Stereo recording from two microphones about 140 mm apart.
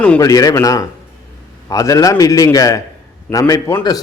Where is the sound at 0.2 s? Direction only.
25° left (ahead or behind).